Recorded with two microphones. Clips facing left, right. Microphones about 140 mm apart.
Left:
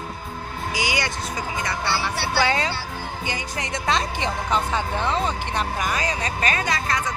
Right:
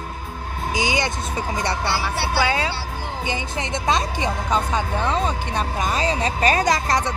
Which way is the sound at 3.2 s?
20° right (ahead or behind).